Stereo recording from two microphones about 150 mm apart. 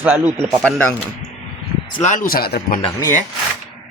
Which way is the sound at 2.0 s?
60° left (ahead or behind).